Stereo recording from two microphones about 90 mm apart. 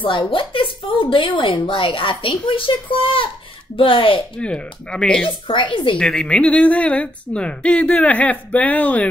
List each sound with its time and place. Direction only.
0.0 s speech: 70° left (ahead or behind)
4.4 s a woman's voice: 10° left (ahead or behind)
5.5 s speech: 65° left (ahead or behind)
5.9 s a woman's voice: 10° left (ahead or behind)